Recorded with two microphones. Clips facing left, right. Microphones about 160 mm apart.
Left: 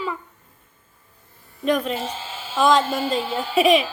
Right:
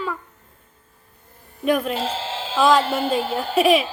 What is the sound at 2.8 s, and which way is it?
Speech, 60° right (ahead or behind).